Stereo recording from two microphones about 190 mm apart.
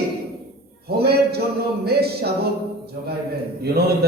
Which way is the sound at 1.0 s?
55° right (ahead or behind).